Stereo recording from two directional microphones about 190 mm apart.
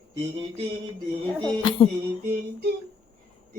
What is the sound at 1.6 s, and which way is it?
Speech, 25° left (ahead or behind).